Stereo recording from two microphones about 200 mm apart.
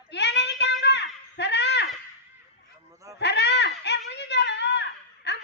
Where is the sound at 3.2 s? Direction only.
60° left (ahead or behind).